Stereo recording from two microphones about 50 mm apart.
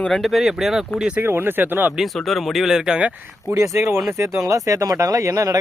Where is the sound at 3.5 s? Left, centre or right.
Right.